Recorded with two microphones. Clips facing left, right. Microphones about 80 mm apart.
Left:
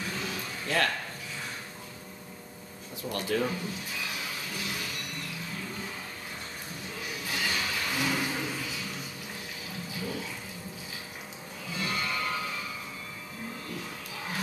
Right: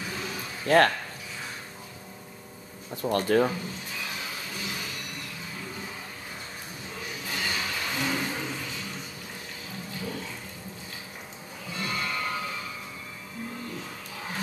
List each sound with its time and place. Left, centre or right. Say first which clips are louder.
0.1 s music: even; centre
0.7 s speech: right 9 dB; right
3.0 s speech: right 7 dB; right
3.4 s a sound: right 2 dB; centre
7.0 s a sound: even; centre
9.8 s music: even; centre
11.7 s music: right 1 dB; centre